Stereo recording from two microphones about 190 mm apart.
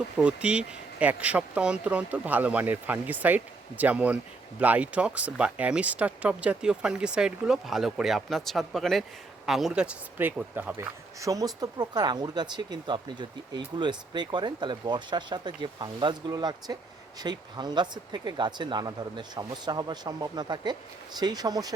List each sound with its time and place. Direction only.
0.2 s speech: 5° right (ahead or behind)